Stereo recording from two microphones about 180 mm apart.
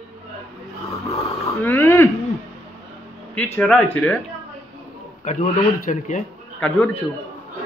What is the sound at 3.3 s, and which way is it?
Speech, 10° left (ahead or behind).